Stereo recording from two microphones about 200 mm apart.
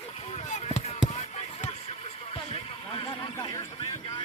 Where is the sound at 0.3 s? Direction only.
35° left (ahead or behind).